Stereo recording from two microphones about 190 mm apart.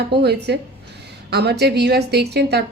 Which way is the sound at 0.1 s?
60° right (ahead or behind).